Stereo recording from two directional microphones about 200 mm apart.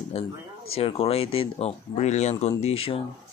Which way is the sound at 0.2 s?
30° left (ahead or behind).